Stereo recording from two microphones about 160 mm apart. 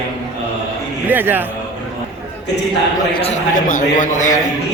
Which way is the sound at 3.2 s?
50° left (ahead or behind).